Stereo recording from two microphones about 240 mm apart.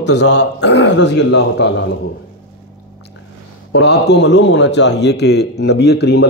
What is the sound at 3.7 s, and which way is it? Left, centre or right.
A man's voice, left.